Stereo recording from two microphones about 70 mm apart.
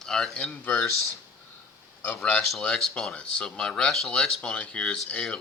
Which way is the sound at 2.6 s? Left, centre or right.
Centre.